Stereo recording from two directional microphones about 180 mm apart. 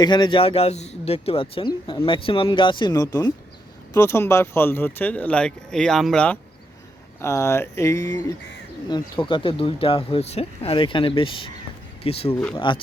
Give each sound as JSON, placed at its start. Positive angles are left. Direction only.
{"t": 0.0, "sound": "speech", "side_deg": 25}
{"t": 12.3, "sound": "speech", "side_deg": 10}
{"t": 12.5, "sound": "speech", "side_deg": 25}